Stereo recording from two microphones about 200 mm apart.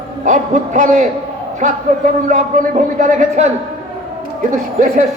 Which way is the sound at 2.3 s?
40° right (ahead or behind).